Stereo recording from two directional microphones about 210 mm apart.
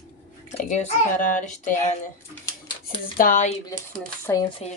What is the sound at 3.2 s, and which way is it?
Speech, 35° left (ahead or behind).